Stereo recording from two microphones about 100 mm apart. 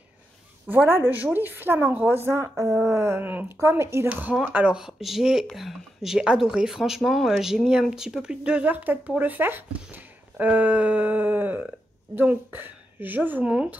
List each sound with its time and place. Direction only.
0.7 s a woman's voice: 20° right (ahead or behind)
4.1 s speech: 15° right (ahead or behind)